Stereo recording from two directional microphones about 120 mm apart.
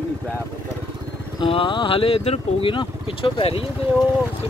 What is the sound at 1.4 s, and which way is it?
Speech, 45° left (ahead or behind).